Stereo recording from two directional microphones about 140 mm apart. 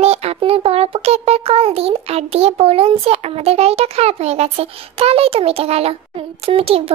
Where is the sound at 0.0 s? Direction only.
45° right (ahead or behind).